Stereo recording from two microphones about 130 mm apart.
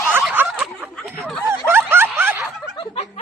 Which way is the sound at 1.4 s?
20° right (ahead or behind).